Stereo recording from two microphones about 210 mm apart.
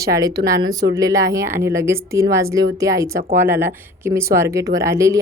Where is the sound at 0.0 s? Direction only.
15° right (ahead or behind).